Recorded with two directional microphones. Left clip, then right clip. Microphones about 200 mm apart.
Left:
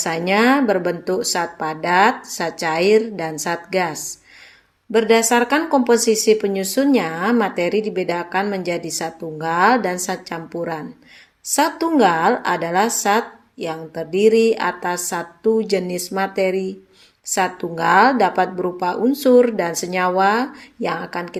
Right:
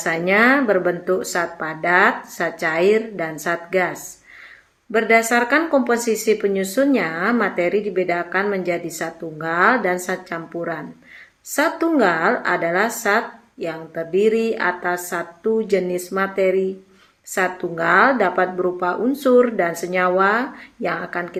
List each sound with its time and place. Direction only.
0.0 s speech: 35° left (ahead or behind)